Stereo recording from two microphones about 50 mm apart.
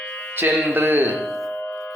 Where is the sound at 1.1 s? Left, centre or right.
Centre.